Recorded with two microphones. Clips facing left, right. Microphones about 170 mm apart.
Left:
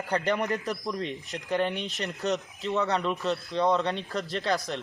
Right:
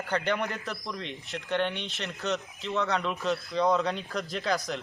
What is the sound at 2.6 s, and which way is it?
Speech, centre (ahead or behind).